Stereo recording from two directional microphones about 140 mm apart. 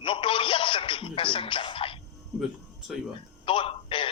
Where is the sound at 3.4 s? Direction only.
40° left (ahead or behind).